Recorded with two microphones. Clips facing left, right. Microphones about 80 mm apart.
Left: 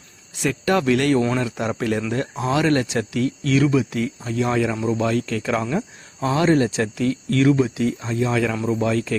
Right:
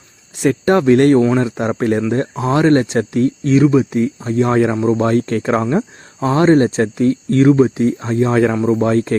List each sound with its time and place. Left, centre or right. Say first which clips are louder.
0.3 s speech: right 7 dB; right
6.8 s speech: right 7 dB; right